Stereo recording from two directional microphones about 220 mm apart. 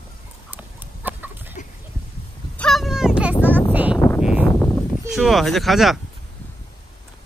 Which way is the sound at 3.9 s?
10° left (ahead or behind).